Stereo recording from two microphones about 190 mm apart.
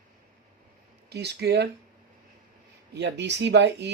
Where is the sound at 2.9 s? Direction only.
65° right (ahead or behind).